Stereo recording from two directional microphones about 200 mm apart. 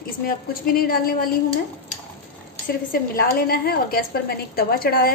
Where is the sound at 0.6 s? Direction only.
45° left (ahead or behind).